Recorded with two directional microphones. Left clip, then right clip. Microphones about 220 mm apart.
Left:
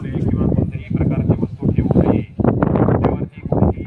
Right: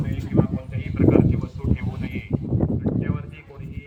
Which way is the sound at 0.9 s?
45° left (ahead or behind).